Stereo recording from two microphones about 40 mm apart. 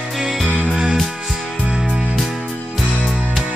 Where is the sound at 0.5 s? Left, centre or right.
Left.